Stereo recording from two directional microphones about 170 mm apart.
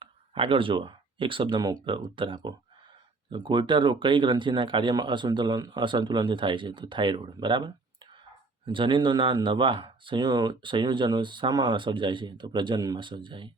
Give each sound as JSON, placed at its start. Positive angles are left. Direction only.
{"t": 0.0, "sound": "speech", "side_deg": -30}